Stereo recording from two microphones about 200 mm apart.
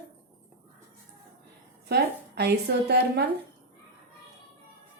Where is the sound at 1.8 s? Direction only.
55° right (ahead or behind).